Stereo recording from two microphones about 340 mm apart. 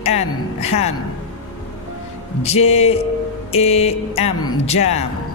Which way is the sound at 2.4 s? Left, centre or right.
Centre.